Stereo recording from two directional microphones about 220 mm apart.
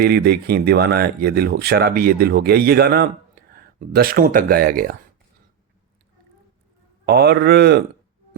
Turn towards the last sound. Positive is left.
turn(degrees=-45)  # may be behind; listen again after turning